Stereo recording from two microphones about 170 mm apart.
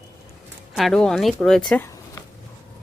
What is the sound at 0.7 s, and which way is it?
Speech, centre (ahead or behind).